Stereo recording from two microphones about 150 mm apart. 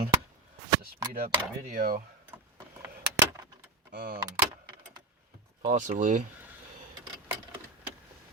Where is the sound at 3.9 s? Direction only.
80° right.